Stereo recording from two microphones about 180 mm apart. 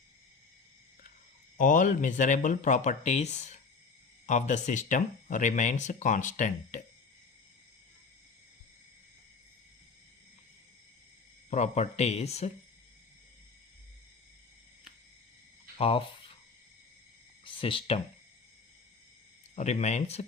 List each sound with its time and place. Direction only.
1.5 s speech: 45° left (ahead or behind)
11.5 s speech: 40° left (ahead or behind)
15.8 s speech: 30° left (ahead or behind)
17.4 s speech: 30° left (ahead or behind)
19.5 s speech: 40° left (ahead or behind)